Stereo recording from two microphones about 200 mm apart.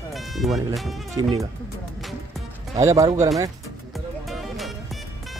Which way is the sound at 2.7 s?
15° right (ahead or behind).